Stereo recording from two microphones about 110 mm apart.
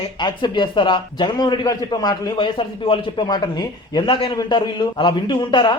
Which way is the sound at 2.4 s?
50° left (ahead or behind).